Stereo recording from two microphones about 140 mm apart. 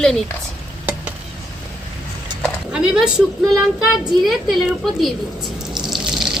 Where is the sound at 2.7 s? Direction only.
5° right (ahead or behind).